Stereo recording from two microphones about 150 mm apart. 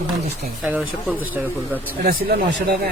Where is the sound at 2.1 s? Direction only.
90° right.